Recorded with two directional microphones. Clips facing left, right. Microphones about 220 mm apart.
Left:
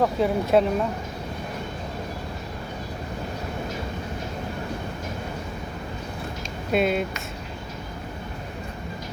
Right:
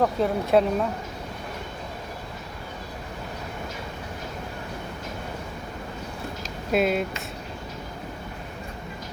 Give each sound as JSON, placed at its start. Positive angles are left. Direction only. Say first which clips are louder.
{"t": 0.0, "sound": "speech", "louder": "left 1 dB", "side_deg": 0}
{"t": 6.7, "sound": "speech", "louder": "even", "side_deg": 0}